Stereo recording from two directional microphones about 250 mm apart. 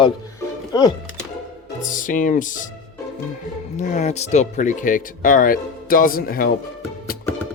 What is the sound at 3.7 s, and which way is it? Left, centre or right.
Speech, left.